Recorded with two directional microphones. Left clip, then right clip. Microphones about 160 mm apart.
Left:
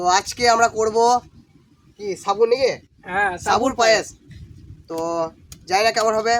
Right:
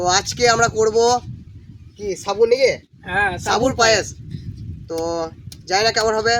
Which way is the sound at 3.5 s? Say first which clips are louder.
Even; 5° left (ahead or behind).